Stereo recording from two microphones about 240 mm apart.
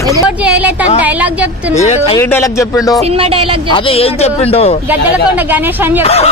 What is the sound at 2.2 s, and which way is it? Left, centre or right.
Speech, centre.